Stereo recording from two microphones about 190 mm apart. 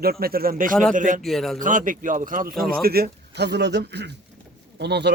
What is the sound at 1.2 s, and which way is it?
Speech, centre (ahead or behind).